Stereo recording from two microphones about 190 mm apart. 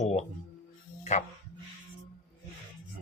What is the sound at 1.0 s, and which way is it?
Music, 40° left (ahead or behind).